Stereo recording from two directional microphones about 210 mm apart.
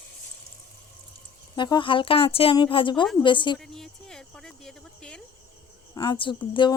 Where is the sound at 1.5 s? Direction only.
20° left (ahead or behind).